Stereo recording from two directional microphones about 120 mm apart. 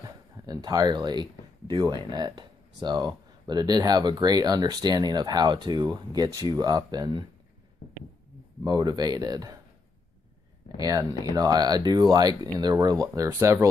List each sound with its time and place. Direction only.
0.0 s a sound: 30° right (ahead or behind)
1.8 s speech: 35° right (ahead or behind)
8.6 s speech: 35° right (ahead or behind)
10.8 s speech: 30° right (ahead or behind)